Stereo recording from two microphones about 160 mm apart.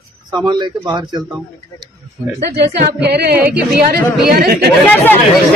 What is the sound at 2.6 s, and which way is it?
Singing, 90° right.